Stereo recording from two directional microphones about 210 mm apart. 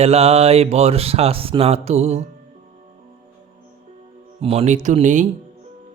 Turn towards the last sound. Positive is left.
turn(degrees=-35)  # may be behind; listen again after turning